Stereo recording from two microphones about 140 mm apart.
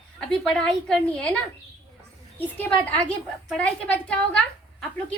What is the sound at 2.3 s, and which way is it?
A woman's voice, 10° left (ahead or behind).